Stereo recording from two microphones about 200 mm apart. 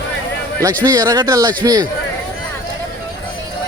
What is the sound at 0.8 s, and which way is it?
Speech, 15° right (ahead or behind).